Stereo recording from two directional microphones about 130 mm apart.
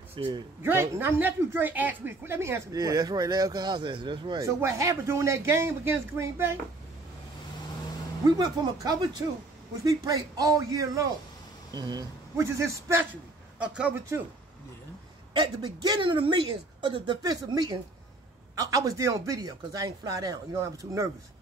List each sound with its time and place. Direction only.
0.1 s a man's voice: 35° right (ahead or behind)
0.6 s speech: 15° right (ahead or behind); by 4.4 s 40° right (ahead or behind)
4.4 s speech: 20° right (ahead or behind)
8.4 s a woman's voice: 30° right (ahead or behind)
12.4 s speech: 20° right (ahead or behind)
13.6 s speech: 10° right (ahead or behind)
15.3 s a woman's voice: 35° right (ahead or behind)